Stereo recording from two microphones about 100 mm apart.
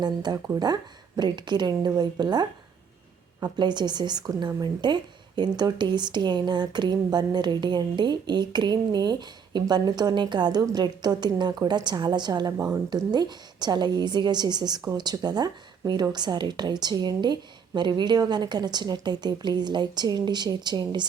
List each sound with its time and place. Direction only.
0.0 s speech: 45° right (ahead or behind)
12.9 s speech: 45° right (ahead or behind)